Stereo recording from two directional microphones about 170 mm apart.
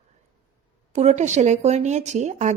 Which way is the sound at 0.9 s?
40° right (ahead or behind).